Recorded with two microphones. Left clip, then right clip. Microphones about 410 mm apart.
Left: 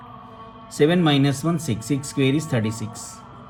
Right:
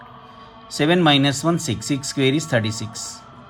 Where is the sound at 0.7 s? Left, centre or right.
Centre.